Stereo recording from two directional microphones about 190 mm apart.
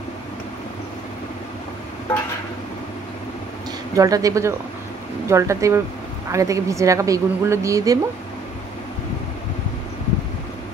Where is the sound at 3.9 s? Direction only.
20° right (ahead or behind).